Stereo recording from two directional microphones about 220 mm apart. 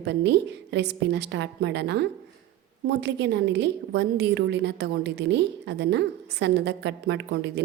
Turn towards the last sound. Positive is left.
turn(degrees=-50)  # may be behind; listen again after turning